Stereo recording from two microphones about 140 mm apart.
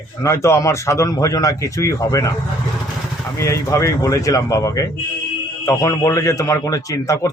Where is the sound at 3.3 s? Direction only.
20° left (ahead or behind).